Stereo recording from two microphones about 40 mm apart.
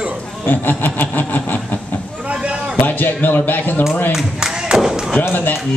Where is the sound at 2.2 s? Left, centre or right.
Right.